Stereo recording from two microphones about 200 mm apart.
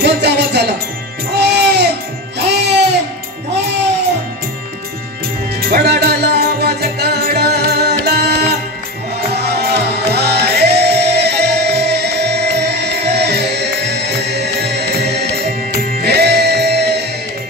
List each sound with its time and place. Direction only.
0.0 s music: 55° right (ahead or behind)
5.7 s music: 55° right (ahead or behind)
16.0 s music: 55° right (ahead or behind)